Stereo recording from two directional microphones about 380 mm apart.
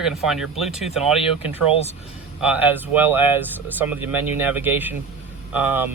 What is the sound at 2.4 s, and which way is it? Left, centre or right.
Speech, centre.